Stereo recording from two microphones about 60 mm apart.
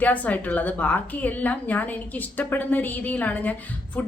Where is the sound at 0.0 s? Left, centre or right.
Left.